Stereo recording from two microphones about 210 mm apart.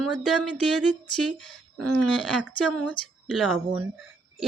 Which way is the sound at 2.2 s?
5° right (ahead or behind).